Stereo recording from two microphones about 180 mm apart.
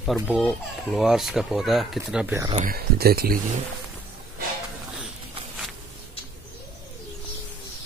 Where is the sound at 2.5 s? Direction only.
50° right (ahead or behind).